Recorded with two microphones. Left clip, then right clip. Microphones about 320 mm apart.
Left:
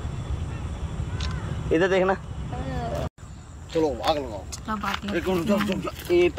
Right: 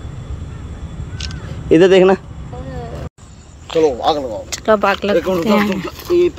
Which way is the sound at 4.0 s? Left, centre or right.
Right.